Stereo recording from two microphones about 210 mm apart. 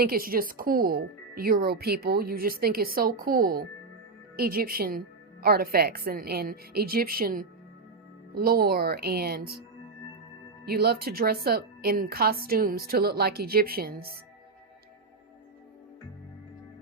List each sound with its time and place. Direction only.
0.0 s speech: 45° right (ahead or behind)
10.7 s speech: 50° right (ahead or behind)